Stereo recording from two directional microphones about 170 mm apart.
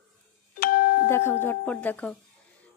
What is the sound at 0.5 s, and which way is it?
Doorbell, 55° left (ahead or behind).